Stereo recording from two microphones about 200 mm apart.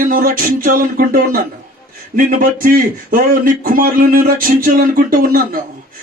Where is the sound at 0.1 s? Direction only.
45° right (ahead or behind).